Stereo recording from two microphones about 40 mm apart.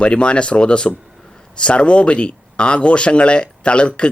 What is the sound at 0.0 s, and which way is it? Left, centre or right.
Speech, left.